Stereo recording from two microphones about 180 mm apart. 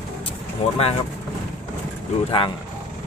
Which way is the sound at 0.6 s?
35° left (ahead or behind).